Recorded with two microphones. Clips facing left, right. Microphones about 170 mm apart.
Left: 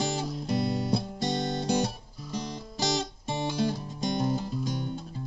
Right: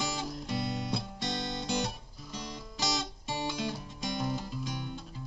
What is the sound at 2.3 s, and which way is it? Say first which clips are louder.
Music: left 6 dB; 35° left (ahead or behind).